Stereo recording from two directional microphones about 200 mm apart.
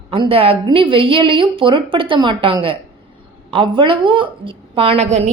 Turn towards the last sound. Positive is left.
turn(degrees=-35)  # may be behind; listen again after turning